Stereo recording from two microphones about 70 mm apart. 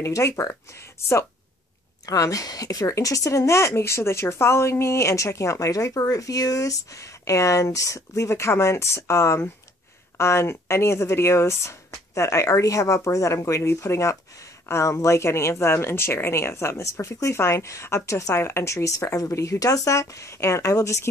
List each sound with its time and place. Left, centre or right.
0.0 s a woman's voice: left
2.0 s a woman's voice: left